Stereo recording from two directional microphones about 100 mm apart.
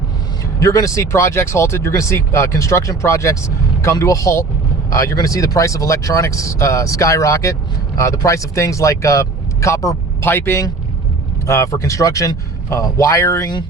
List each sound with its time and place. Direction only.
0.6 s speech: 30° left (ahead or behind)